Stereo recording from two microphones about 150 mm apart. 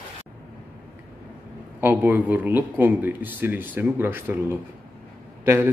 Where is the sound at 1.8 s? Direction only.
15° right (ahead or behind).